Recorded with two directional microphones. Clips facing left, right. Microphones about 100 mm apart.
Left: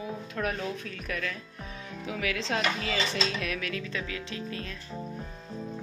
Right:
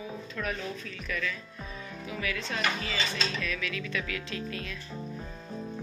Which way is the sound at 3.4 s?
60° left (ahead or behind).